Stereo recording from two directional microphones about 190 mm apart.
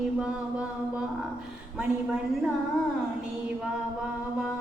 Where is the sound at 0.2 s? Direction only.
5° right (ahead or behind).